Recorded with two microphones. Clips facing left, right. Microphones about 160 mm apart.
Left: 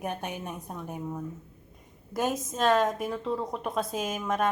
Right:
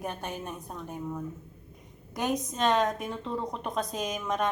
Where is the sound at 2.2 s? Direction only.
Centre (ahead or behind).